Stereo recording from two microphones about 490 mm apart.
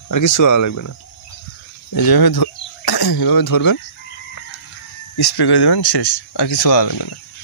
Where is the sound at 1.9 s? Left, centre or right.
Left.